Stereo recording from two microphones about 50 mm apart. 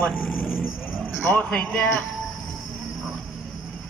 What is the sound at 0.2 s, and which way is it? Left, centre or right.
Vehicle, left.